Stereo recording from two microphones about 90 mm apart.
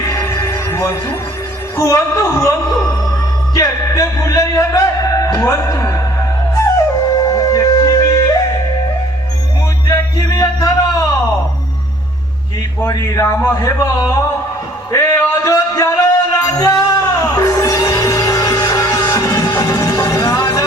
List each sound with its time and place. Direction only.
0.0 s music: 35° left (ahead or behind)
1.7 s speech: 35° left (ahead or behind)
7.3 s music: 40° left (ahead or behind)
9.8 s music: 40° left (ahead or behind)
12.9 s speech: 35° left (ahead or behind)
14.9 s music: 35° left (ahead or behind)